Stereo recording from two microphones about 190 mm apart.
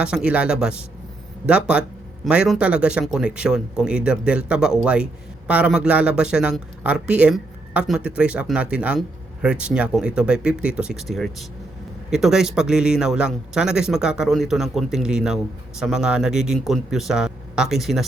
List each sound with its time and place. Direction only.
0.0 s a man's voice: 5° right (ahead or behind)